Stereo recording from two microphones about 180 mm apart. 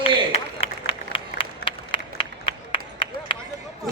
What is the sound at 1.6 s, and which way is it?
Run, 30° left (ahead or behind).